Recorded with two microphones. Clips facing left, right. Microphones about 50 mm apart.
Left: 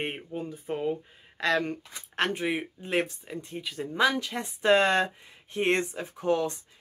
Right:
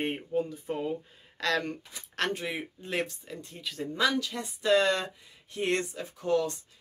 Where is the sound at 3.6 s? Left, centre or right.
Centre.